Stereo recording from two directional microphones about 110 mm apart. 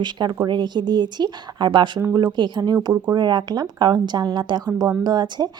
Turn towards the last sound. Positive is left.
turn(degrees=-40)  # may be behind; listen again after turning